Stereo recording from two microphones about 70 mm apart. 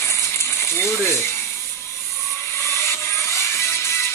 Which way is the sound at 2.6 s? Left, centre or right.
Left.